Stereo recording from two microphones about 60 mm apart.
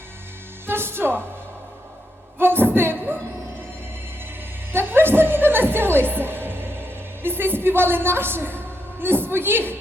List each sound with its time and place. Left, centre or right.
0.7 s speech: right
2.4 s a sound: right
4.7 s music: right
7.2 s a woman's voice: right